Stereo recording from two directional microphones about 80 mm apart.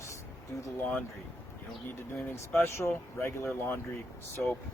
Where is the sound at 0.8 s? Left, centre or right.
Left.